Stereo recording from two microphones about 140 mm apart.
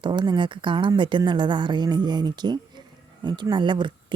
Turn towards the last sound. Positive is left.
turn(degrees=-35)  # may be behind; listen again after turning